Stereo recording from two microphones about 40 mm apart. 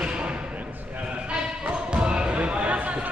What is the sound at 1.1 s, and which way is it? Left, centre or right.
Basketball bounce, right.